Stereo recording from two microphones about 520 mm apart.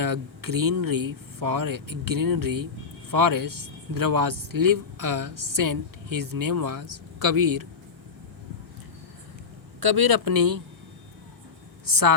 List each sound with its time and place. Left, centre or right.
0.0 s a man's voice: right
9.8 s a man's voice: right
11.9 s a man's voice: right